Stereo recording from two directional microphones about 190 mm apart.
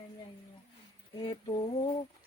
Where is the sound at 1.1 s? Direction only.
25° left (ahead or behind).